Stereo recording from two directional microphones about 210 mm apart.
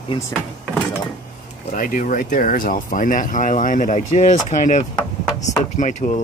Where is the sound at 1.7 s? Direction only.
40° left (ahead or behind).